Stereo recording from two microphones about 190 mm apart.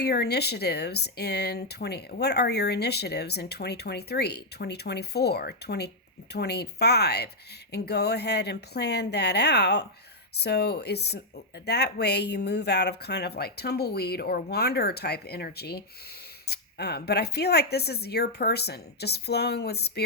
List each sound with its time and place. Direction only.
0.0 s speech: 60° left (ahead or behind)